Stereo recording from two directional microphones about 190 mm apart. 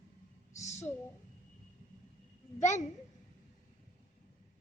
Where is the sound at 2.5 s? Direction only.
40° left (ahead or behind).